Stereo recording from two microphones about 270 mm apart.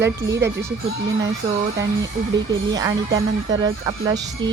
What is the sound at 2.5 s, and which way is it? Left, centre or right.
A woman's voice, centre.